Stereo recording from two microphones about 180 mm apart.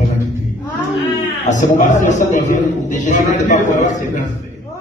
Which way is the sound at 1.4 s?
40° left (ahead or behind).